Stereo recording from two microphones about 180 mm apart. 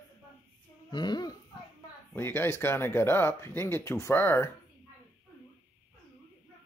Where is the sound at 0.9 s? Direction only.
25° left (ahead or behind).